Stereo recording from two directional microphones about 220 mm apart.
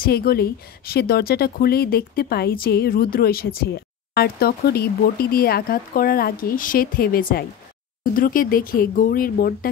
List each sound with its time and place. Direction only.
0.0 s speech: 40° left (ahead or behind)